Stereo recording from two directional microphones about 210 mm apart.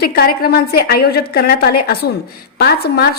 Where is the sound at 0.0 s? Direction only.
45° left (ahead or behind).